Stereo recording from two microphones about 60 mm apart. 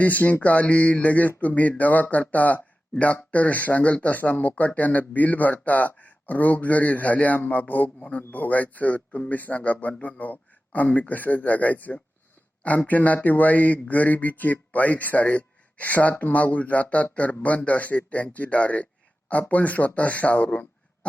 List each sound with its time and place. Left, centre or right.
0.0 s speech: left